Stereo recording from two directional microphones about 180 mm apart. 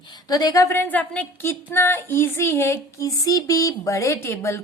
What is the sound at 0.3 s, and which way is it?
A woman's voice, 20° left (ahead or behind).